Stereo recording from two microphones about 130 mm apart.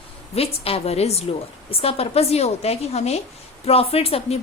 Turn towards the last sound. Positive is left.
turn(degrees=50)  # may be behind; listen again after turning